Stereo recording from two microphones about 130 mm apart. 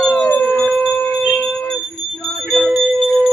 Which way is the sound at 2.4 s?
Centre (ahead or behind).